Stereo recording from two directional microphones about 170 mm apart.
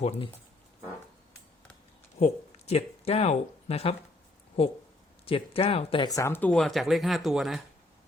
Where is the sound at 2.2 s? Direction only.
40° left (ahead or behind).